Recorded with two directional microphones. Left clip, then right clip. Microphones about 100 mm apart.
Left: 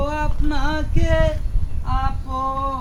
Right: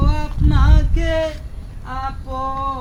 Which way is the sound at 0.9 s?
5° left (ahead or behind).